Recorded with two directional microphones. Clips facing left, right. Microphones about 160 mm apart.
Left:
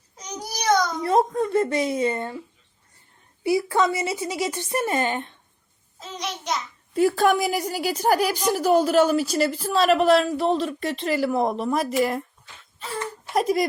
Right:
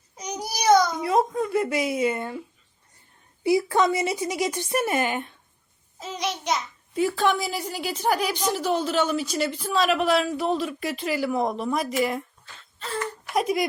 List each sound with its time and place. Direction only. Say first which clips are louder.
0.2 s babbling: right 2 dB; 10° right (ahead or behind)
3.4 s a woman's voice: even; 20° right (ahead or behind)
6.0 s child singing: right 3 dB; 5° right (ahead or behind)
7.2 s a woman's voice: left 4 dB; 45° left (ahead or behind)
7.6 s a woman's voice: left 3 dB; 5° left (ahead or behind)
12.5 s a sound: right 1 dB; 10° left (ahead or behind)
13.3 s a man's voice: left 2 dB; centre (ahead or behind)